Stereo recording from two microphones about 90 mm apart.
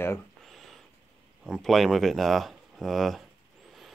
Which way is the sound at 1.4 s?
Centre (ahead or behind).